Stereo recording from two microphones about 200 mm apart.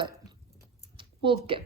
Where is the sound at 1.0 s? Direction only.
25° right (ahead or behind).